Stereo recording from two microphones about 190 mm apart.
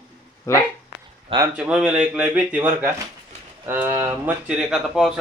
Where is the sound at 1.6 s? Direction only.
5° right (ahead or behind).